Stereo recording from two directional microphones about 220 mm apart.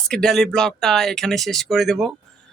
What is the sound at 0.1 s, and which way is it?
Speech, centre (ahead or behind).